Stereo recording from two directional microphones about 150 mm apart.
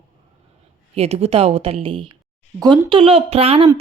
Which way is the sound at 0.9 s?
45° right (ahead or behind).